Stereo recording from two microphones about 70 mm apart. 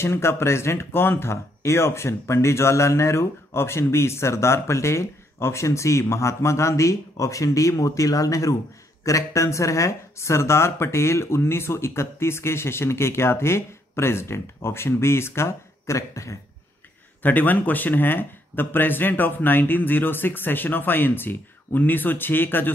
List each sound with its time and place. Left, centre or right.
0.0 s speech: left
17.2 s speech: left